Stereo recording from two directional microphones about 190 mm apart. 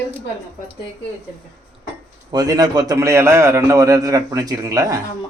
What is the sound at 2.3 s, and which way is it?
A man's voice, 20° right (ahead or behind).